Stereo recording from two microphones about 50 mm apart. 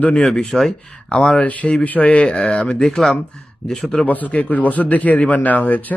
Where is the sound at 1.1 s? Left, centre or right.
Centre.